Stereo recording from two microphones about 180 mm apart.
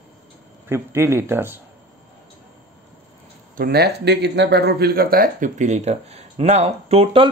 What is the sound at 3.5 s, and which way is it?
Speech, 60° right (ahead or behind).